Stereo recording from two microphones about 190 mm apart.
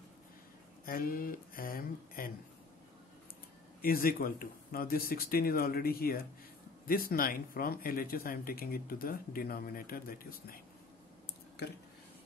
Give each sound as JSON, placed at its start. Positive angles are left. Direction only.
{"t": 0.8, "sound": "speech", "side_deg": 50}
{"t": 3.8, "sound": "speech", "side_deg": 50}
{"t": 11.6, "sound": "speech", "side_deg": 60}